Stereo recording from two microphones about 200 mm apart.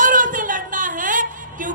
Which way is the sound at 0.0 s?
40° right (ahead or behind).